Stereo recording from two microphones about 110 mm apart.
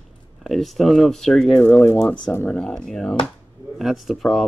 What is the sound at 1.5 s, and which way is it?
Speech, 20° left (ahead or behind).